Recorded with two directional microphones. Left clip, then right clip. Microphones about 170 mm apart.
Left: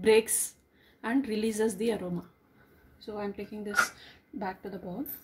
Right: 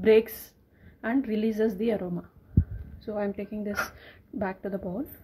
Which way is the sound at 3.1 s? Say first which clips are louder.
Right 5 dB; 35° right (ahead or behind).